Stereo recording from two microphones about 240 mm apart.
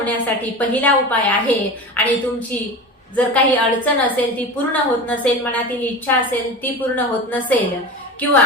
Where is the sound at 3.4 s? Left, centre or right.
Centre.